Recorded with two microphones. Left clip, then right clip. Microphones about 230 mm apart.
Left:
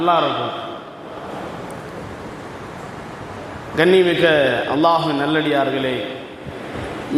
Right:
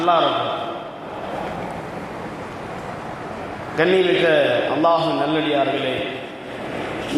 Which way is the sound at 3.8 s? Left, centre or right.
Left.